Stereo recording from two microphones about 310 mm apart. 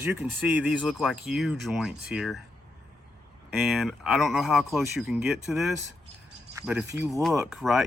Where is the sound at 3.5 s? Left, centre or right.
Centre.